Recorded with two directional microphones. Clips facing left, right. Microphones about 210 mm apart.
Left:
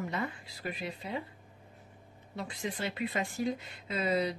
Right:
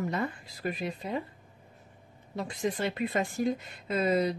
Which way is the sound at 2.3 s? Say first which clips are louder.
Right 6 dB; 45° right (ahead or behind).